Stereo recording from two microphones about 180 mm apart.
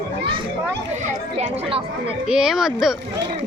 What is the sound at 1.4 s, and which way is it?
Speech, 35° right (ahead or behind).